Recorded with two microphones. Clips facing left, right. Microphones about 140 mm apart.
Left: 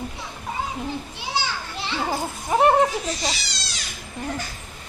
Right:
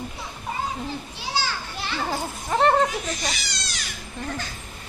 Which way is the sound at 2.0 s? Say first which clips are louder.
Left 3 dB; 15° left (ahead or behind).